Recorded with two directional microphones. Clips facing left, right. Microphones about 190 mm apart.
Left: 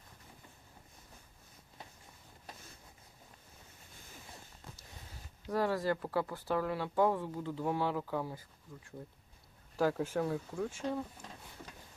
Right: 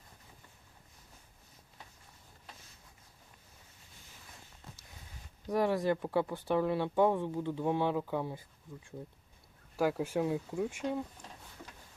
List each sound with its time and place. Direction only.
5.5 s speech: 20° right (ahead or behind)
9.7 s speech: 10° right (ahead or behind)